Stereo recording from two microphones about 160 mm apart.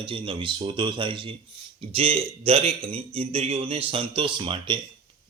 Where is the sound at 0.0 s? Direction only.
35° right (ahead or behind).